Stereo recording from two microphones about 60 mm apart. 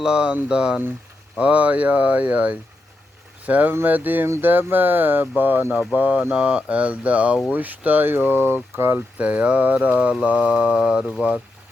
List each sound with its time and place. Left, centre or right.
0.0 s speech: centre
1.4 s mantra: right
3.8 s speech: right
5.9 s mantra: right
7.5 s speech: right
9.1 s mantra: right